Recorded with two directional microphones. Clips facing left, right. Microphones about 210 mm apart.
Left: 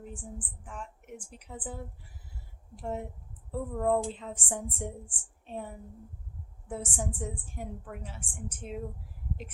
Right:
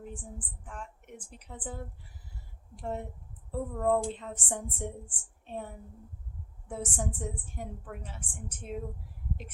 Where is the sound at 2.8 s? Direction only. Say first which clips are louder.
Left 1 dB; 5° left (ahead or behind).